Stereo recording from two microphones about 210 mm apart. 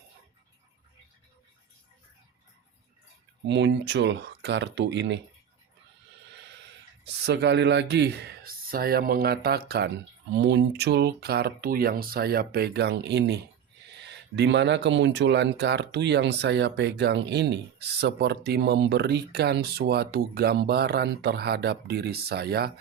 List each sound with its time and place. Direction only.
3.5 s speech: 55° right (ahead or behind)
7.3 s speech: 55° right (ahead or behind)